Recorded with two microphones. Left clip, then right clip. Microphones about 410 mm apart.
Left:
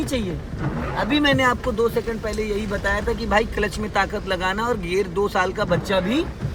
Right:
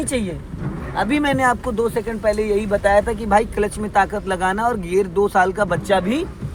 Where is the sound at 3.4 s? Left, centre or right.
Centre.